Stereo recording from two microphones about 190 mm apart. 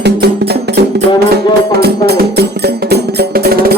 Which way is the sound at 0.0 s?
60° right (ahead or behind).